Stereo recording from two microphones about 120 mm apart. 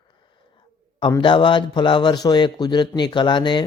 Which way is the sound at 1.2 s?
45° left (ahead or behind).